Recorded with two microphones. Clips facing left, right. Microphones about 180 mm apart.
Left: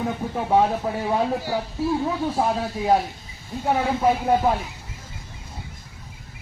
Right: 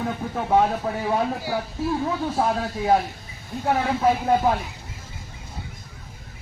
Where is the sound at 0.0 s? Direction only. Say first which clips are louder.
Left 1 dB; 10° left (ahead or behind).